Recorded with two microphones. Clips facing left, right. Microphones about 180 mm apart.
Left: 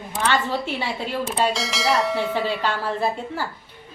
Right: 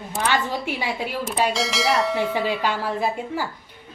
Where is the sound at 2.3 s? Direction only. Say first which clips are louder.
Right 1 dB; 15° right (ahead or behind).